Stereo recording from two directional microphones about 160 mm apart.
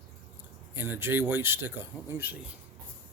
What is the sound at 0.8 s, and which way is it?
Speech, 15° right (ahead or behind).